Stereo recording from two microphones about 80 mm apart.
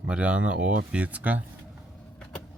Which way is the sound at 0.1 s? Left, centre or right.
Centre.